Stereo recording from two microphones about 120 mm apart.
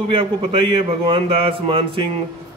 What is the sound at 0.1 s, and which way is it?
A man's voice, 50° right (ahead or behind).